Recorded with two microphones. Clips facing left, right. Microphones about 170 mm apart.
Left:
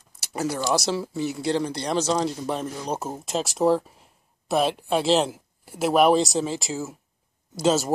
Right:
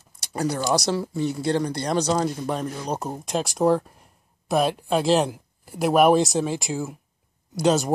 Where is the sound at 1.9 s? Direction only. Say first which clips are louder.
Right 1 dB; 20° right (ahead or behind).